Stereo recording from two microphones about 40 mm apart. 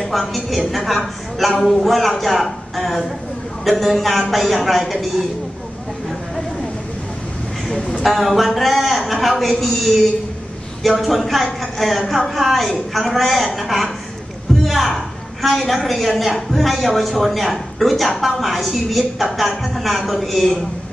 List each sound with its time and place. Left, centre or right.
0.0 s a man's voice: centre
8.0 s a man's voice: centre
14.6 s a sound: centre
14.9 s a woman's voice: centre